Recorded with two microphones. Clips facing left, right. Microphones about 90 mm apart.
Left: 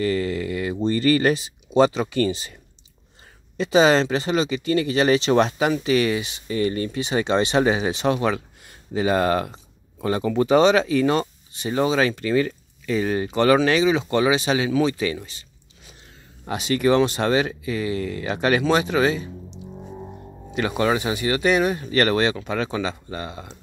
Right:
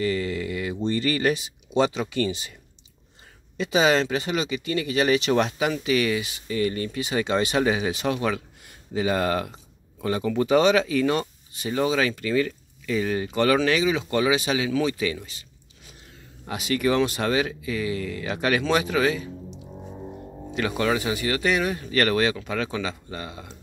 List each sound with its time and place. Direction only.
0.0 s speech: 45° left (ahead or behind)
3.5 s speech: 35° left (ahead or behind)
16.4 s speech: 30° left (ahead or behind)